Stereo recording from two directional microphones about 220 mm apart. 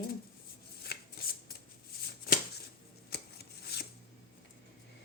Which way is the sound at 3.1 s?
45° left (ahead or behind).